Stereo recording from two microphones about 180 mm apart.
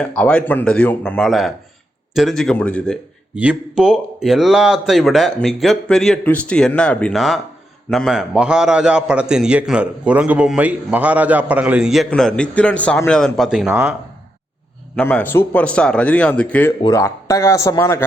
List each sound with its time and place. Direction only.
0.0 s a man's voice: 5° left (ahead or behind)
3.3 s a man's voice: 5° right (ahead or behind)
14.9 s a man's voice: 10° left (ahead or behind)